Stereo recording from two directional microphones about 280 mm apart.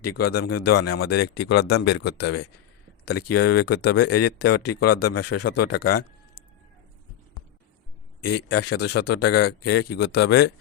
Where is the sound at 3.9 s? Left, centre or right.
Left.